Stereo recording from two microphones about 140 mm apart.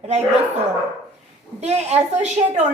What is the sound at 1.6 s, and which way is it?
A woman's voice, 50° right (ahead or behind).